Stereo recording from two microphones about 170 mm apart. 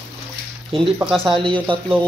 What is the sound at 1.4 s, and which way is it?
Speech, 30° right (ahead or behind).